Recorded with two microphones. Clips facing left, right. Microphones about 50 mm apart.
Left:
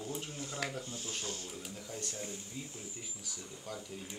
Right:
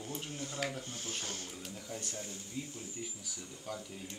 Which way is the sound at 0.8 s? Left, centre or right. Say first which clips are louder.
Even; right.